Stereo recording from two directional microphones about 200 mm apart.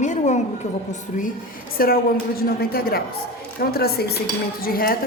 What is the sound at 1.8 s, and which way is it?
A woman's voice, 45° left (ahead or behind).